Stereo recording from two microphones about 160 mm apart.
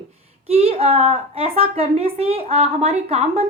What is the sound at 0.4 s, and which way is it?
A woman's voice, 40° right (ahead or behind).